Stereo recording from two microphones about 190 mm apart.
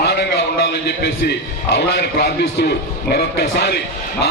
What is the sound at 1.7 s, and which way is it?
A man's voice, 60° left (ahead or behind).